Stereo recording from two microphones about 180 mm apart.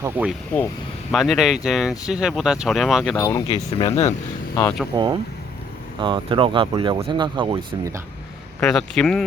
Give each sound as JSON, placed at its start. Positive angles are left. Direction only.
{"t": 0.0, "sound": "speech", "side_deg": -10}
{"t": 3.2, "sound": "speech", "side_deg": 15}
{"t": 3.5, "sound": "speech", "side_deg": 30}
{"t": 4.6, "sound": "speech", "side_deg": 0}
{"t": 6.0, "sound": "speech", "side_deg": -25}
{"t": 8.6, "sound": "speech", "side_deg": 5}